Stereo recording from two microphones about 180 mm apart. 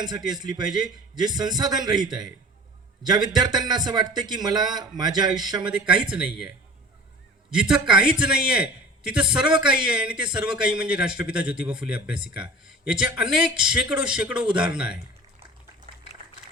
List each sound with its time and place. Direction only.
0.3 s a man's voice: 25° right (ahead or behind)
5.6 s a man's voice: 5° right (ahead or behind)
7.5 s a man's voice: 5° right (ahead or behind)